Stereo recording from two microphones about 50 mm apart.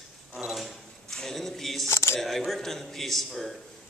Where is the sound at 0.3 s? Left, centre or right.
Centre.